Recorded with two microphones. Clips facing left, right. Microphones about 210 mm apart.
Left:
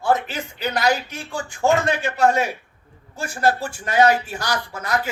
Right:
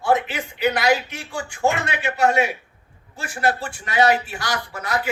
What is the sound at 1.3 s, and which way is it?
Speech, 40° left (ahead or behind).